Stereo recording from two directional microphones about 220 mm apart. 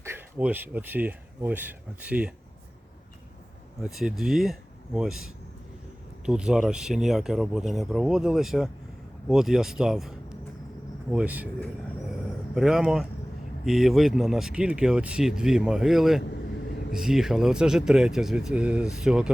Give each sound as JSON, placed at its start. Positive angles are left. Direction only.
{"t": 0.0, "sound": "speech", "side_deg": -10}
{"t": 3.8, "sound": "speech", "side_deg": 0}
{"t": 6.2, "sound": "speech", "side_deg": -5}